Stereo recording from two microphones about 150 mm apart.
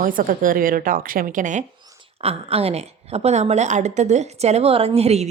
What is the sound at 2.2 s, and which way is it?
A woman's voice, 40° right (ahead or behind).